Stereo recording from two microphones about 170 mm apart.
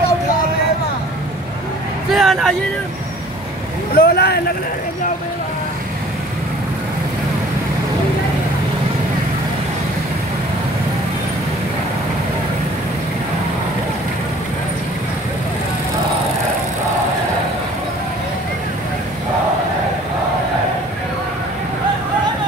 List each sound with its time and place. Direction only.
2.1 s vehicle: centre (ahead or behind)
3.9 s speech: 65° left (ahead or behind)